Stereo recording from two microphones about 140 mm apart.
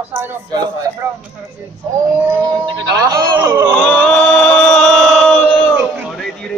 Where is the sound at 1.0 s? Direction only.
20° right (ahead or behind).